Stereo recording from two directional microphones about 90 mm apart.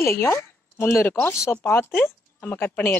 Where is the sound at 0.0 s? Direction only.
30° left (ahead or behind).